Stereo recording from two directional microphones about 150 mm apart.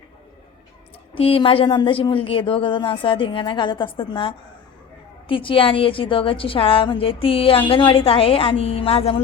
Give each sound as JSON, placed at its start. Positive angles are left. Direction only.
{"t": 1.1, "sound": "a woman's voice", "side_deg": 35}